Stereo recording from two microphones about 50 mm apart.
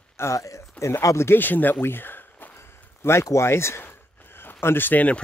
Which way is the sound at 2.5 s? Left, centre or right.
Left.